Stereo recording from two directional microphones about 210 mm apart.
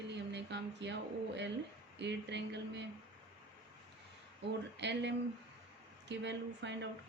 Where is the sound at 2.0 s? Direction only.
55° right (ahead or behind).